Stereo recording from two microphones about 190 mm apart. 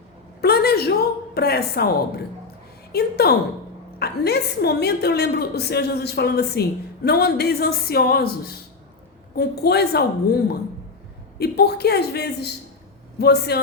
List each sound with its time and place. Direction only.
0.4 s a sound: 55° left (ahead or behind)
2.9 s a woman's voice: 55° left (ahead or behind)
11.3 s a woman's voice: 55° left (ahead or behind)